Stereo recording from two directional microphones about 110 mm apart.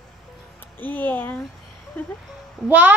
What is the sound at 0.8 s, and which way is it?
Speech, 15° left (ahead or behind).